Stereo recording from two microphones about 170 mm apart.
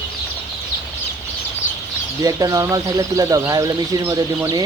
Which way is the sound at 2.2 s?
20° right (ahead or behind).